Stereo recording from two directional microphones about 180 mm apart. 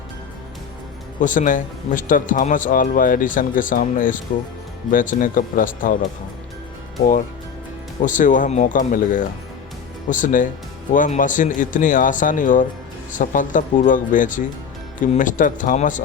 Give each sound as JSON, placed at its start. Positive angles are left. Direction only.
{"t": 1.2, "sound": "speech", "side_deg": 45}
{"t": 8.0, "sound": "speech", "side_deg": 45}